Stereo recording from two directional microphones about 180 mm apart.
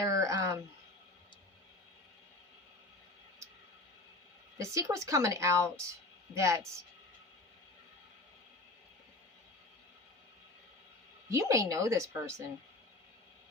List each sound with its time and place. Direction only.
0.0 s a sound: 20° right (ahead or behind)
4.5 s a woman's voice: 15° right (ahead or behind)
11.3 s a woman's voice: 15° right (ahead or behind)